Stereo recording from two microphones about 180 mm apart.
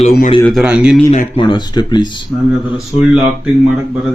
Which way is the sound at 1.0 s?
35° left (ahead or behind).